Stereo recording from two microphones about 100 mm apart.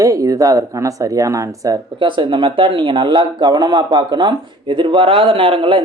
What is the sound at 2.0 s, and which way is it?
Speech, 55° right (ahead or behind).